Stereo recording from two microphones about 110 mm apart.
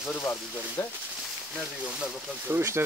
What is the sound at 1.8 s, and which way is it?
Speech, 10° right (ahead or behind).